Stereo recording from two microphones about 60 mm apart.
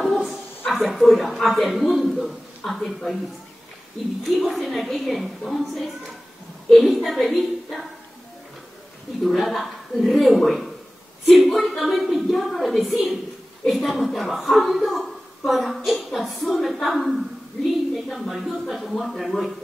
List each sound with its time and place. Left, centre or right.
0.0 s a sound: centre
0.7 s a woman's voice: centre
4.2 s a woman's voice: centre
9.2 s a woman's voice: centre